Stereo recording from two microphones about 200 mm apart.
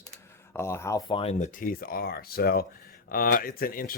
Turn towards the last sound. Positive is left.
turn(degrees=45)  # may be behind; listen again after turning